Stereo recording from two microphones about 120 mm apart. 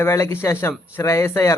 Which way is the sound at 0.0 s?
25° left (ahead or behind).